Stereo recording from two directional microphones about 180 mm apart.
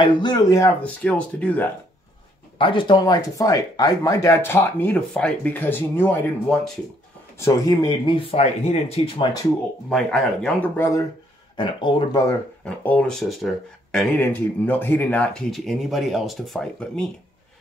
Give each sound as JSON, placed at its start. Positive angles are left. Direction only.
{"t": 0.0, "sound": "speech", "side_deg": 25}
{"t": 2.6, "sound": "speech", "side_deg": 25}
{"t": 8.2, "sound": "speech", "side_deg": 35}
{"t": 9.8, "sound": "speech", "side_deg": 5}
{"t": 11.5, "sound": "speech", "side_deg": 25}
{"t": 12.6, "sound": "speech", "side_deg": 5}